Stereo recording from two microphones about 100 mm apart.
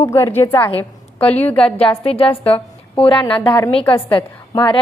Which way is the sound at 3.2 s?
55° left (ahead or behind).